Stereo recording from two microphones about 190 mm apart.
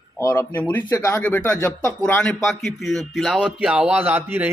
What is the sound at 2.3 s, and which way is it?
A man's voice, centre (ahead or behind).